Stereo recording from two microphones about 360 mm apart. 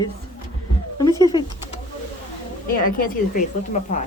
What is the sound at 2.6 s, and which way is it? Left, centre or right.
Speech, left.